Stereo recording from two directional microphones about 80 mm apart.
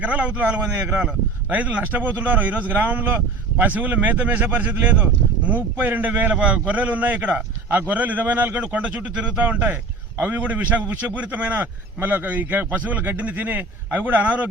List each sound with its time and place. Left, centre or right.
0.0 s a man's voice: centre